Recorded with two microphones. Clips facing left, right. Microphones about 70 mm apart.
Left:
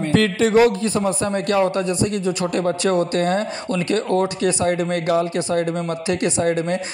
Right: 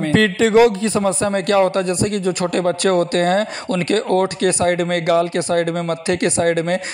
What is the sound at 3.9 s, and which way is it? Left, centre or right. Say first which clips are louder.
Speech: right 3 dB; right.